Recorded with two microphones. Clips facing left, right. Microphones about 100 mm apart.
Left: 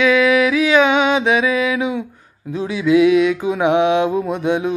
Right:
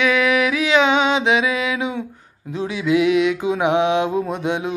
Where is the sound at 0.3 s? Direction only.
30° right (ahead or behind).